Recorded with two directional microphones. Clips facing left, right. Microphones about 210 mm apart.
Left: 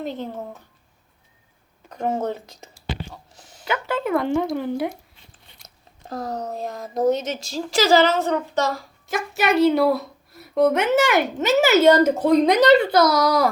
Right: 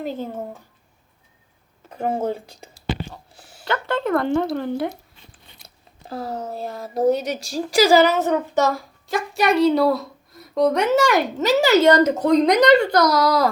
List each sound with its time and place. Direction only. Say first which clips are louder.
0.0 s a woman's voice: right 1 dB; 5° right (ahead or behind)
1.9 s speech: right 1 dB; 10° right (ahead or behind)
2.5 s whispering: right 1 dB; 30° right (ahead or behind)
3.1 s a sound: right 1 dB; 10° right (ahead or behind)
3.6 s speech: right 1 dB; 10° left (ahead or behind)
5.6 s a sound: even; 30° right (ahead or behind)
6.5 s a woman's voice: even; 5° right (ahead or behind)
9.0 s speech: right 2 dB; 5° left (ahead or behind)